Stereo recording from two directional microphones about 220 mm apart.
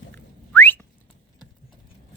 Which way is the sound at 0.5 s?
10° left (ahead or behind).